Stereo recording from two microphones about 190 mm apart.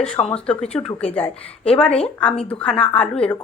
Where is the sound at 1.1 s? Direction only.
5° left (ahead or behind).